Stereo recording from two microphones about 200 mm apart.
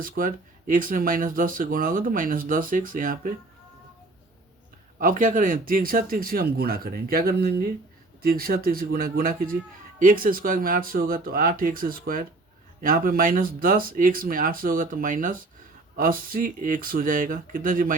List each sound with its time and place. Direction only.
0.0 s speech: 45° right (ahead or behind)
4.9 s speech: 40° right (ahead or behind)